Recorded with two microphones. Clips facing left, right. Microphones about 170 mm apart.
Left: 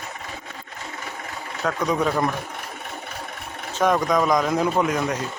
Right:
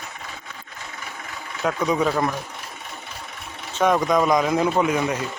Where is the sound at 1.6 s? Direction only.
5° right (ahead or behind).